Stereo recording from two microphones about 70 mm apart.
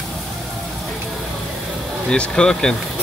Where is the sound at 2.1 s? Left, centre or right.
Centre.